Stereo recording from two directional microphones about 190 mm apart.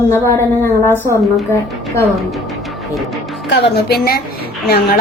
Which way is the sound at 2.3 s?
Centre (ahead or behind).